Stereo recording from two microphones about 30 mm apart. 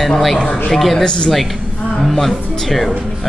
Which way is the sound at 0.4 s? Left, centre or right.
Left.